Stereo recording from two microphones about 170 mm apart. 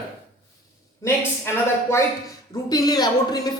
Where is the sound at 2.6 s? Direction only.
20° left (ahead or behind).